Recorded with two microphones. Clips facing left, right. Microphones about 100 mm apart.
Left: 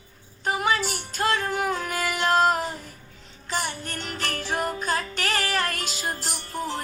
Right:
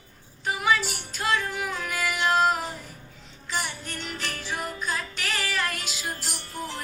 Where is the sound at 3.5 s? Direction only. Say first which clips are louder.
Left 3 dB; 45° left (ahead or behind).